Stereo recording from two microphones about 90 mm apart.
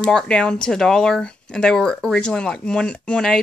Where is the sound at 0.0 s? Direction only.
10° left (ahead or behind).